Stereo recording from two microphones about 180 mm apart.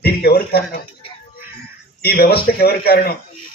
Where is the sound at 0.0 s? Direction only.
60° left (ahead or behind).